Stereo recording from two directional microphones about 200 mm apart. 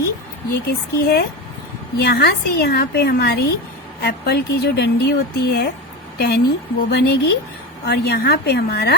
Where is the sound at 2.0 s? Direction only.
55° left (ahead or behind).